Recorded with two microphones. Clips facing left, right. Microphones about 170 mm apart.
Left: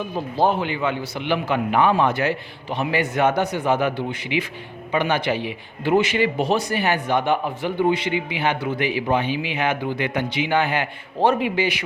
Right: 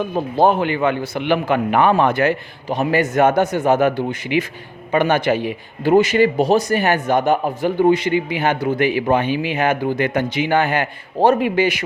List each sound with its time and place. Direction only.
0.1 s a man's voice: 50° right (ahead or behind)